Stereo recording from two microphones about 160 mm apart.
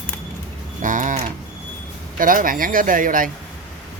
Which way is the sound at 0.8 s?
55° right (ahead or behind).